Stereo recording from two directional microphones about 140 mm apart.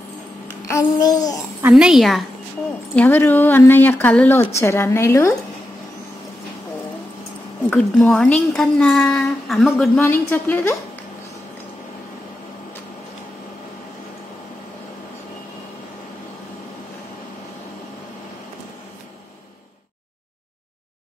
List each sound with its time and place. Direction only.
0.7 s a woman's voice: 25° left (ahead or behind)
1.7 s speech: 5° right (ahead or behind)
3.0 s a woman's voice: 15° left (ahead or behind)
7.7 s speech: 5° left (ahead or behind)
9.9 s speech: 15° left (ahead or behind)